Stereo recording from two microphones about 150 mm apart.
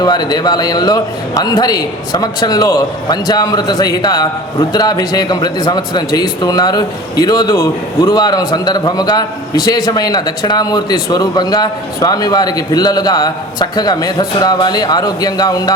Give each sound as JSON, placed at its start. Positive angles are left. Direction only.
{"t": 0.0, "sound": "speech", "side_deg": 25}